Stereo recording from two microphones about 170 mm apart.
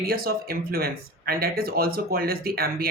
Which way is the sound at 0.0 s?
60° right (ahead or behind).